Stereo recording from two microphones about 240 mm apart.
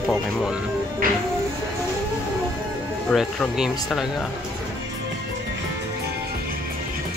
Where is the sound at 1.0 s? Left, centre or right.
Right.